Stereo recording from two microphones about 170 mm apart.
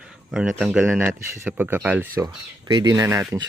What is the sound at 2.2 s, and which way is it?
Speech, 25° right (ahead or behind).